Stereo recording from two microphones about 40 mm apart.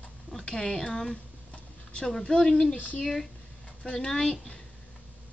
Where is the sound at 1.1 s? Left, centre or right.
Left.